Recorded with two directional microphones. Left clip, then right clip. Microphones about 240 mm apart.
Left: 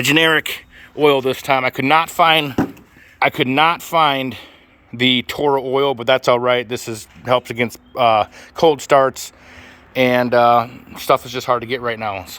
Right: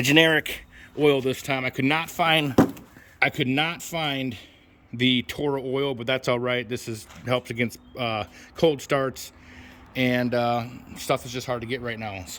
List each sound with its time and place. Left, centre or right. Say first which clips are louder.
0.0 s speech: left 5 dB; centre